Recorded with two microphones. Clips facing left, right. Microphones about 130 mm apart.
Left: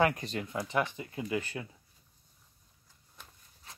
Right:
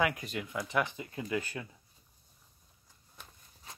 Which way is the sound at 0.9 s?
20° left (ahead or behind).